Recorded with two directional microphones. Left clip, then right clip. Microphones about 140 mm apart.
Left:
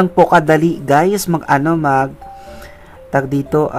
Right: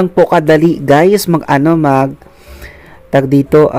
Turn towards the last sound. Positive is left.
turn(degrees=-30)  # may be behind; listen again after turning